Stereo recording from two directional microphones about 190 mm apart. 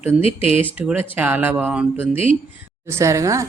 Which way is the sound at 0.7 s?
10° right (ahead or behind).